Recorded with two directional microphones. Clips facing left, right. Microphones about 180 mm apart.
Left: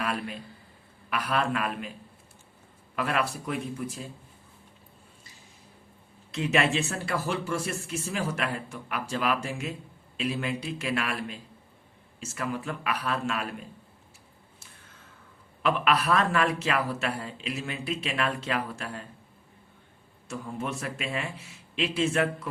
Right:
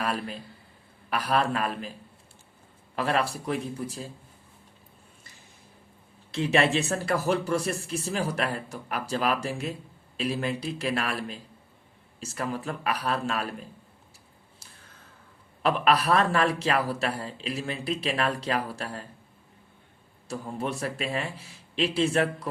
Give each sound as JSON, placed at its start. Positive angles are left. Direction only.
{"t": 0.0, "sound": "a man's voice", "side_deg": -35}
{"t": 2.9, "sound": "a man's voice", "side_deg": -30}
{"t": 6.3, "sound": "a man's voice", "side_deg": -30}
{"t": 14.6, "sound": "a sound", "side_deg": -35}
{"t": 15.6, "sound": "a man's voice", "side_deg": -35}
{"t": 20.2, "sound": "a man's voice", "side_deg": -35}